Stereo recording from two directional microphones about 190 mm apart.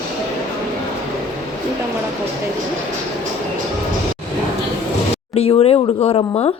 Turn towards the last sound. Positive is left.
turn(degrees=25)  # may be behind; listen again after turning